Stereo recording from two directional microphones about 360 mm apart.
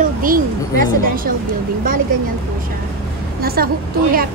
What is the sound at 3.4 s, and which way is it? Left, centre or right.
Speech, right.